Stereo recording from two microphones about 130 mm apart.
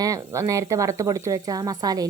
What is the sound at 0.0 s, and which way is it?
A woman's voice, 25° right (ahead or behind).